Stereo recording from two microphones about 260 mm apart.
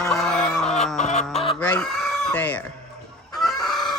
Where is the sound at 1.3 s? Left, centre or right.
Left.